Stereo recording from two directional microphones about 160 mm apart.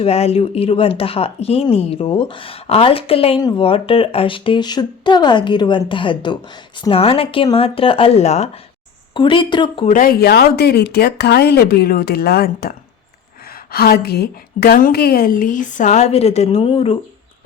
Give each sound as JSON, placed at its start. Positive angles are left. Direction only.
{"t": 0.0, "sound": "speech", "side_deg": 40}
{"t": 9.1, "sound": "speech", "side_deg": 30}
{"t": 9.8, "sound": "a woman's voice", "side_deg": 55}